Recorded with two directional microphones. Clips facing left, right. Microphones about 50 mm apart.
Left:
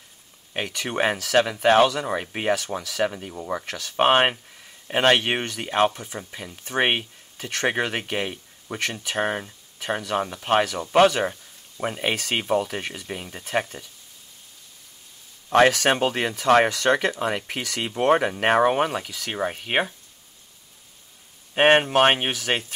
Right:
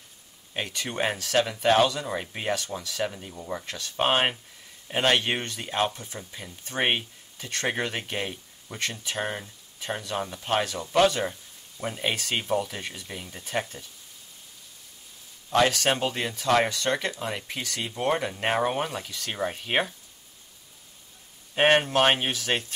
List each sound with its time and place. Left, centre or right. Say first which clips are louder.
0.5 s speech: left 4 dB; left
3.3 s speech: left 5 dB; left
15.5 s speech: left 5 dB; left
16.6 s speech: left 6 dB; left
17.1 s speech: left 6 dB; left
19.2 s speech: left 1 dB; left
21.5 s speech: left 4 dB; left